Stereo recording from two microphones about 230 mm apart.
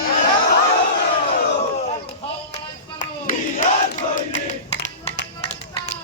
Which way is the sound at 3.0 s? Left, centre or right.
Left.